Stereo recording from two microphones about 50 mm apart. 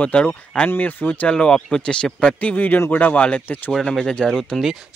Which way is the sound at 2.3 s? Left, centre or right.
Left.